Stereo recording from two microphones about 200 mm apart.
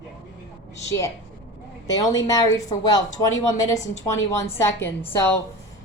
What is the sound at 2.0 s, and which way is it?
A woman's voice, 20° left (ahead or behind).